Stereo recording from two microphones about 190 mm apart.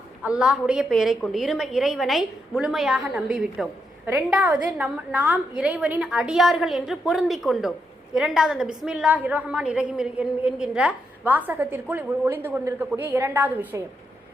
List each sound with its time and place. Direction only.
0.2 s a woman's voice: 5° right (ahead or behind)